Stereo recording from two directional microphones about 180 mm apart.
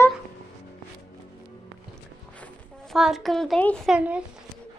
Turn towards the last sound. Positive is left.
turn(degrees=-5)  # may be behind; listen again after turning